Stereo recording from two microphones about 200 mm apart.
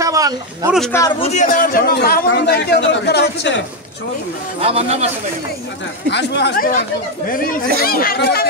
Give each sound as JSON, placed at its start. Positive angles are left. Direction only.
{"t": 0.0, "sound": "speech", "side_deg": -15}
{"t": 1.2, "sound": "a man's voice", "side_deg": 35}
{"t": 4.6, "sound": "a man's voice", "side_deg": -30}
{"t": 6.0, "sound": "a man's voice", "side_deg": 60}